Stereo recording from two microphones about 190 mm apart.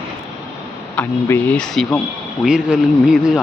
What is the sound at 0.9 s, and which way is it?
Speech, 10° left (ahead or behind).